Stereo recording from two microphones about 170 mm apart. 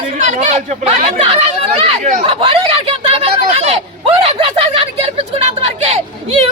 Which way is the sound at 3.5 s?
40° right (ahead or behind).